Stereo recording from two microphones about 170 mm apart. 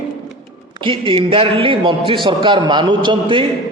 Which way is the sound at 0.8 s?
30° right (ahead or behind).